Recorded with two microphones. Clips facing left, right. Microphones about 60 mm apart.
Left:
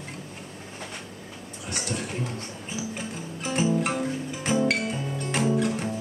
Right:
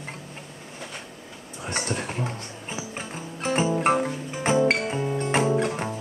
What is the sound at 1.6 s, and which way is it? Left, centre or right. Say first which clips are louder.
Music: right 3 dB; right.